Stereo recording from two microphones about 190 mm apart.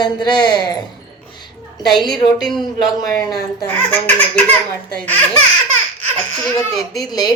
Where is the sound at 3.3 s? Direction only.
20° left (ahead or behind).